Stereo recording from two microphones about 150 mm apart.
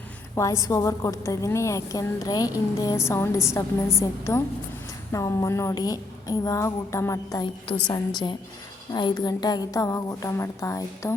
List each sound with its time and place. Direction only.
0.3 s a woman's voice: 20° left (ahead or behind)